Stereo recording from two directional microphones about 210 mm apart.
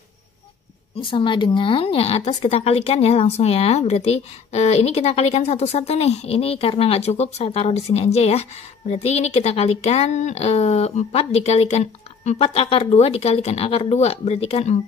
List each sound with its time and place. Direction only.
1.0 s speech: 25° left (ahead or behind)